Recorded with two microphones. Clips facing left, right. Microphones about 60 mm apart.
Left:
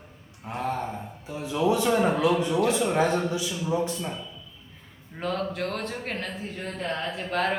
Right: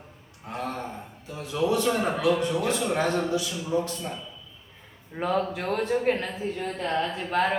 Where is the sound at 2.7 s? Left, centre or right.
Centre.